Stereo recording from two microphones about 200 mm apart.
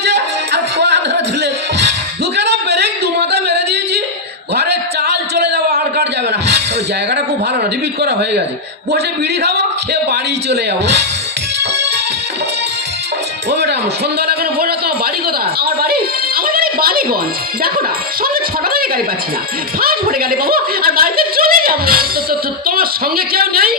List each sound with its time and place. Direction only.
0.0 s music: 55° right (ahead or behind)
2.3 s a sound: 55° right (ahead or behind)
8.0 s speech: 55° right (ahead or behind)
9.4 s speech: 55° right (ahead or behind)
13.5 s music: 55° right (ahead or behind)
14.2 s a sound: 50° right (ahead or behind)
15.6 s music: 50° right (ahead or behind)
17.6 s speech: 45° right (ahead or behind)
19.8 s speech: 45° right (ahead or behind)